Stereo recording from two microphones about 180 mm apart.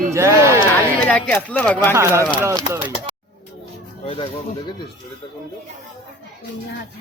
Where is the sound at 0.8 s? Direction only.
10° left (ahead or behind).